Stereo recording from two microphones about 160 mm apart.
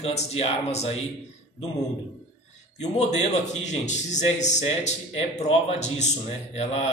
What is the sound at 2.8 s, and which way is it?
A man's voice, 45° left (ahead or behind).